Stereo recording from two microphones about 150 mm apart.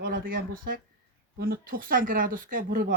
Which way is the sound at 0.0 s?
75° right (ahead or behind).